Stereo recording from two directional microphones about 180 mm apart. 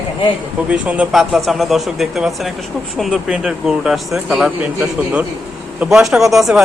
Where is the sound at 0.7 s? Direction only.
5° right (ahead or behind).